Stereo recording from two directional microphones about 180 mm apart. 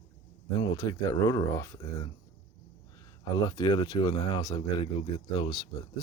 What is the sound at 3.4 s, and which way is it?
Speech, 25° left (ahead or behind).